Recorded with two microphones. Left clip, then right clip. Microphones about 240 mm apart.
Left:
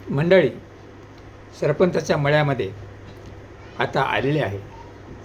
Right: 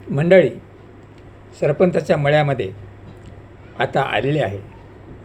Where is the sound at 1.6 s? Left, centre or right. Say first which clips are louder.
Right 3 dB; centre.